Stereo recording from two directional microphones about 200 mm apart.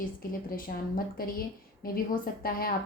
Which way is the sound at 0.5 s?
45° left (ahead or behind).